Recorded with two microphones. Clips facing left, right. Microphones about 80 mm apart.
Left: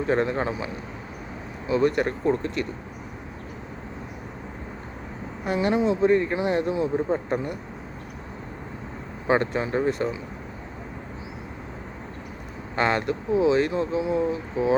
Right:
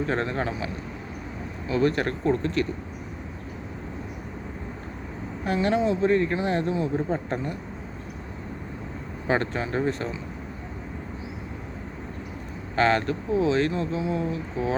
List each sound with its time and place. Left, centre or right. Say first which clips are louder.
0.0 s speech: left 3 dB; centre
5.5 s speech: left 1 dB; centre
9.2 s speech: left 3 dB; centre
12.7 s speech: right 1 dB; centre